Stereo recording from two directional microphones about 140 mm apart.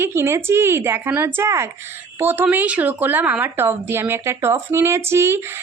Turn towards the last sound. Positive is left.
turn(degrees=-20)  # may be behind; listen again after turning